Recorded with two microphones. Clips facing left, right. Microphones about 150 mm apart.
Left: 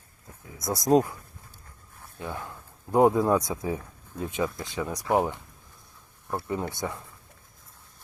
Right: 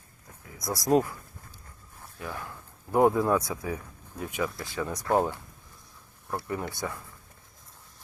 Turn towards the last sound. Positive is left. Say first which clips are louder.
# left 2 dB
turn(degrees=20)  # may be behind; listen again after turning